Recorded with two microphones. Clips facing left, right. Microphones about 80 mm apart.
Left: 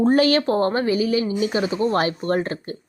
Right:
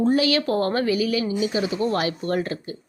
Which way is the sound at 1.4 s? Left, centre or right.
Left.